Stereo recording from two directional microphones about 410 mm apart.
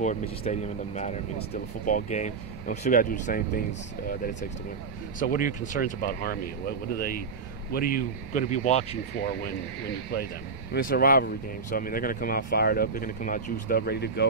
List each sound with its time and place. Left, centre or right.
0.0 s speech: centre
10.7 s speech: left